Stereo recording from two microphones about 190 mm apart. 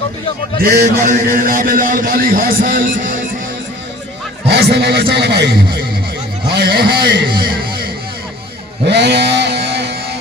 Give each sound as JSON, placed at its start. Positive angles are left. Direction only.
{"t": 0.6, "sound": "a man's voice", "side_deg": -45}
{"t": 4.4, "sound": "a man's voice", "side_deg": -60}
{"t": 8.9, "sound": "a sound", "side_deg": -65}